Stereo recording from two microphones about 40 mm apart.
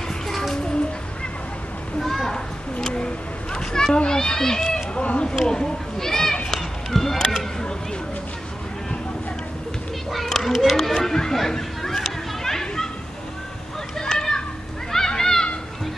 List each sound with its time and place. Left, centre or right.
0.1 s child singing: centre
2.0 s children playing: centre
4.9 s speech: left
5.4 s run: centre
10.1 s children playing: centre
13.9 s children playing: centre
14.9 s a sound: centre